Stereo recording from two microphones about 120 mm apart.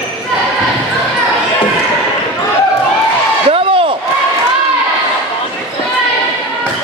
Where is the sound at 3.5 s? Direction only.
50° right (ahead or behind).